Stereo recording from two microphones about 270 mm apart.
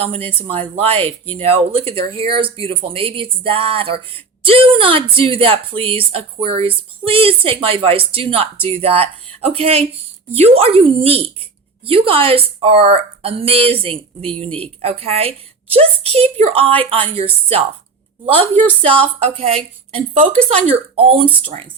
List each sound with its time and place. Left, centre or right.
0.0 s speech: right
18.8 s speech: right